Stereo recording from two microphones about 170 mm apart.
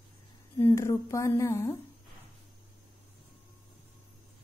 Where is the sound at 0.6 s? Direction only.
15° left (ahead or behind).